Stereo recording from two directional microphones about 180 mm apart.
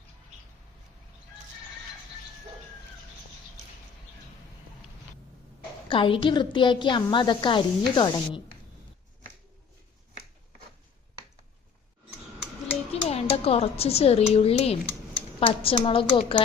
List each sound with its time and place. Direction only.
5.9 s a woman's voice: 30° left (ahead or behind)
12.9 s a woman's voice: 35° left (ahead or behind)